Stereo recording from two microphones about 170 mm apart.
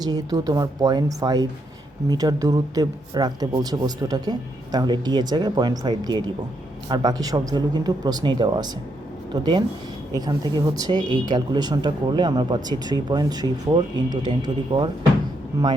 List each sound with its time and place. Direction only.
0.0 s speech: 20° right (ahead or behind)